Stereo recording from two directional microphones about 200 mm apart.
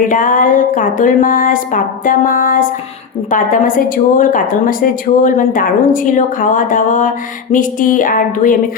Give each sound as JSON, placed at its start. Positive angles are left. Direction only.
{"t": 0.1, "sound": "a woman's voice", "side_deg": 40}